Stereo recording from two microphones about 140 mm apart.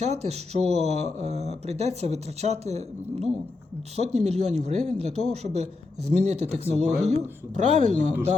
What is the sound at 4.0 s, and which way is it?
Speech, 50° right (ahead or behind).